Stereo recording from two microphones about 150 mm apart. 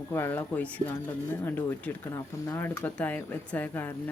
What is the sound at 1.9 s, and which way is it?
Speech, 10° left (ahead or behind).